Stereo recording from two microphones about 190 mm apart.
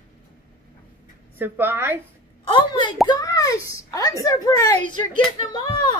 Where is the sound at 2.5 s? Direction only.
25° left (ahead or behind).